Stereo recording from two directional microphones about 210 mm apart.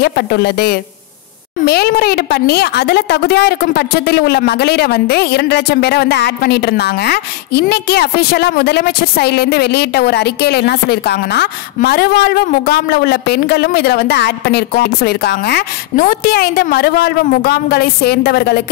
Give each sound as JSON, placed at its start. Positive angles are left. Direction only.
{"t": 0.0, "sound": "a woman's voice", "side_deg": 50}